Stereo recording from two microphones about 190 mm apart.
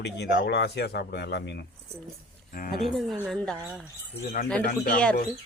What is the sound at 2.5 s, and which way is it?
Speech, 50° left (ahead or behind).